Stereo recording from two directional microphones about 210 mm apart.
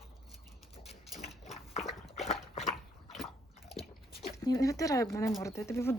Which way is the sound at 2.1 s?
Centre (ahead or behind).